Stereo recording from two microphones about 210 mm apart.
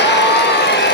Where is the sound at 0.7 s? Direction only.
55° left (ahead or behind).